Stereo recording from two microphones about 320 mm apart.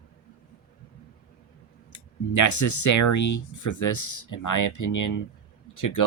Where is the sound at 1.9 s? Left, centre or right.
Left.